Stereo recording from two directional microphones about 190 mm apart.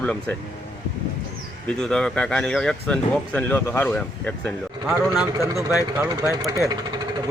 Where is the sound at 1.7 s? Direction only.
5° left (ahead or behind).